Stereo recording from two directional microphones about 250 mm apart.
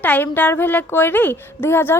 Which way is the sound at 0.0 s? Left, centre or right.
Centre.